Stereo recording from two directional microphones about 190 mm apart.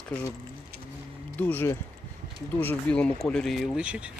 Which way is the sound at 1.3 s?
10° left (ahead or behind).